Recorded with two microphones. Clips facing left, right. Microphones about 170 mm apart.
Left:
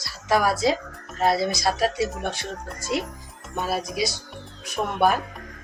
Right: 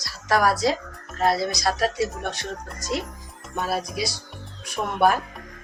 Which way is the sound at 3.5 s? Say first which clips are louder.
Left 1 dB; centre (ahead or behind).